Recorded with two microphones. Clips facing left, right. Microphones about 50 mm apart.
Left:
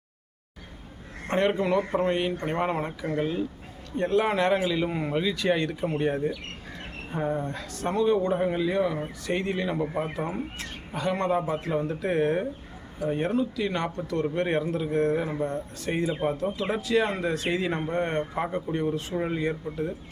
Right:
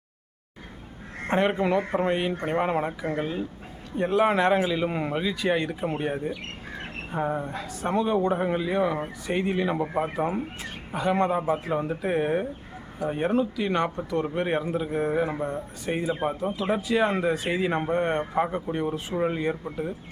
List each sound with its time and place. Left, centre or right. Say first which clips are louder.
1.3 s speech: right 1 dB; centre